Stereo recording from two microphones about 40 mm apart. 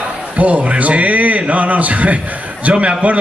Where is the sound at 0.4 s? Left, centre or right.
Right.